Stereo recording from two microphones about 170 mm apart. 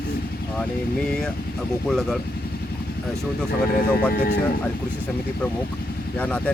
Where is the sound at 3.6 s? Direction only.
60° left (ahead or behind).